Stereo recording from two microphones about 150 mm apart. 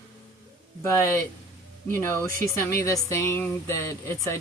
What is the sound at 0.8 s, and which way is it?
Speech, 20° left (ahead or behind).